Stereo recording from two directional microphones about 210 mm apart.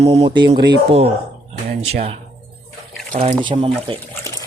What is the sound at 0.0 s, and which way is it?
Speech, 30° right (ahead or behind).